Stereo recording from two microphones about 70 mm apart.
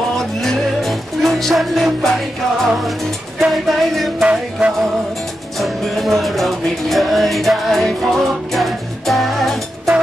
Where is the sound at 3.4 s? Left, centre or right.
Centre.